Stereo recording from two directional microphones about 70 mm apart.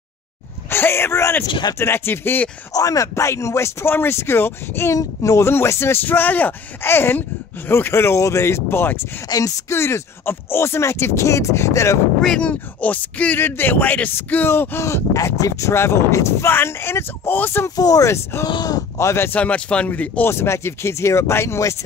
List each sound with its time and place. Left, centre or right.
0.7 s speech: left
2.7 s speech: left
4.9 s speech: left
5.5 s speech: left
9.3 s speech: left
9.7 s speech: left
12.4 s speech: centre; by 15.0 s left
15.1 s speech: left
17.6 s speech: left
18.1 s speech: left
19.3 s speech: centre
20.2 s speech: left